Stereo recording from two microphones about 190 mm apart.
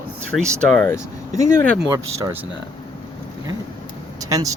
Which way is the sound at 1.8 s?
15° right (ahead or behind).